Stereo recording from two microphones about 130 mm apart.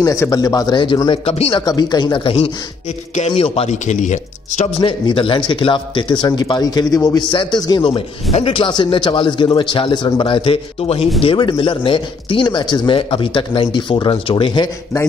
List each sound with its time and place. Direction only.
0.0 s speech: 25° left (ahead or behind); by 1.6 s 45° left (ahead or behind)
1.6 s speech: 30° left (ahead or behind); by 4.8 s 65° left (ahead or behind)
4.8 s speech: 40° left (ahead or behind); by 7.2 s 25° left (ahead or behind)
7.2 s speech: 35° left (ahead or behind)
7.9 s speech: 50° left (ahead or behind)